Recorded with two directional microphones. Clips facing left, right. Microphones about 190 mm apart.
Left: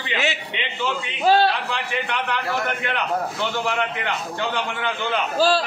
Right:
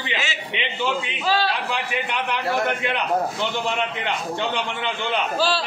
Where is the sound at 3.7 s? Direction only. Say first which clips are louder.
Even; 20° right (ahead or behind).